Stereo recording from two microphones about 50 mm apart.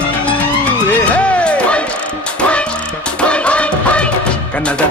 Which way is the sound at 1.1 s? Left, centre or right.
Left.